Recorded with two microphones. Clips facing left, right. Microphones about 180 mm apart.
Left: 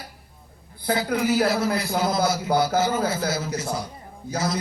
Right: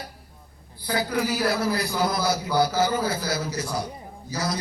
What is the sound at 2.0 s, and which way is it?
A man's voice, 25° left (ahead or behind).